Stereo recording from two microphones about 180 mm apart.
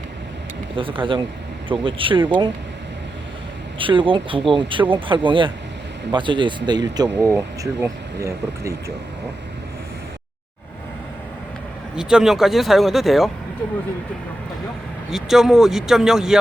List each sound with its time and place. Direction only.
0.8 s speech: 30° right (ahead or behind)
3.8 s speech: 30° right (ahead or behind)
11.9 s speech: 5° right (ahead or behind)
15.1 s speech: centre (ahead or behind)